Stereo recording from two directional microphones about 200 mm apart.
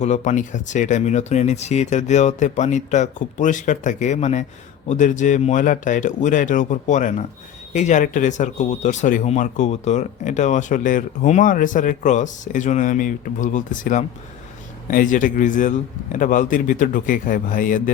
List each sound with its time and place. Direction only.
0.0 s speech: 35° left (ahead or behind)